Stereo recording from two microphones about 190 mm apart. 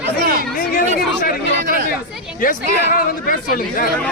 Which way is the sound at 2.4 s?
45° left (ahead or behind).